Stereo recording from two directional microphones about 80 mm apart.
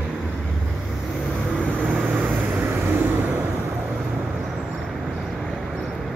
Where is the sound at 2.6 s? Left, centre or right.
Right.